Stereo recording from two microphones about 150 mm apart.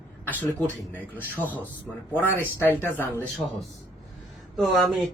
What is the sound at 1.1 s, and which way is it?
Speech, 10° left (ahead or behind).